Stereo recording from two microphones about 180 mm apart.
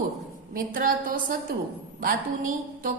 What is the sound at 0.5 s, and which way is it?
Speech, 50° right (ahead or behind).